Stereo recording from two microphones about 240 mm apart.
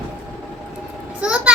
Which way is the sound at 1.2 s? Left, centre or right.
Centre.